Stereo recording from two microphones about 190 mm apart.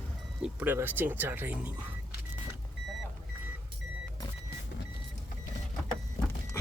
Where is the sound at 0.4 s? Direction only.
10° right (ahead or behind).